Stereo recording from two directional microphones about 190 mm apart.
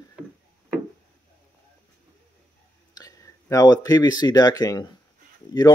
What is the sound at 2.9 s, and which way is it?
Speech, 20° left (ahead or behind).